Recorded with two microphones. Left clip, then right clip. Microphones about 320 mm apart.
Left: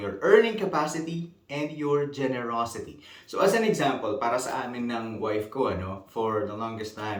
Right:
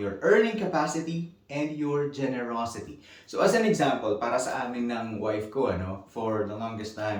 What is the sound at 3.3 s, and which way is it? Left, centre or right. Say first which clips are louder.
Speech: even; centre.